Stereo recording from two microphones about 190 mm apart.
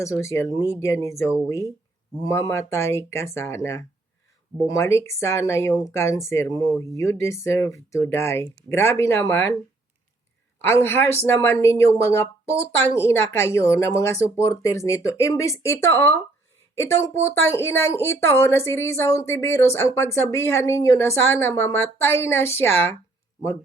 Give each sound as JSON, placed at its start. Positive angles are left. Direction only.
{"t": 0.0, "sound": "a woman's voice", "side_deg": 15}
{"t": 1.1, "sound": "speech", "side_deg": -5}
{"t": 1.5, "sound": "a woman's voice", "side_deg": 15}
{"t": 10.6, "sound": "a woman's voice", "side_deg": 10}